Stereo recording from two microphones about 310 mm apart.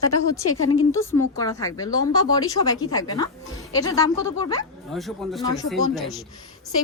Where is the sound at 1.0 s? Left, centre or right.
Centre.